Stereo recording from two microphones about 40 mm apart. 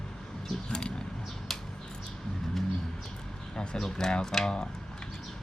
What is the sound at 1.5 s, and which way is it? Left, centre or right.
Bird, centre.